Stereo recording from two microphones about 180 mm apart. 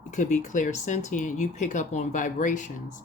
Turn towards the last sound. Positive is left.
turn(degrees=45)  # may be behind; listen again after turning